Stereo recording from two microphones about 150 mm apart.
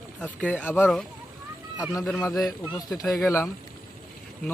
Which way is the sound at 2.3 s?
Centre (ahead or behind).